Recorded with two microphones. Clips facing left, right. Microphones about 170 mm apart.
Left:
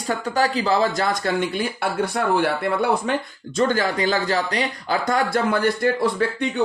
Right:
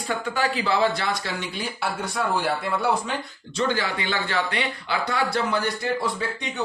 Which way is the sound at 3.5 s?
45° left (ahead or behind).